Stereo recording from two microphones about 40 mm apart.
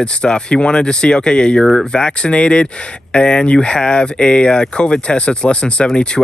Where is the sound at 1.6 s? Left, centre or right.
Centre.